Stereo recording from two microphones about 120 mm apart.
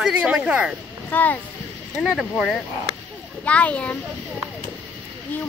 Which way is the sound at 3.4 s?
10° left (ahead or behind).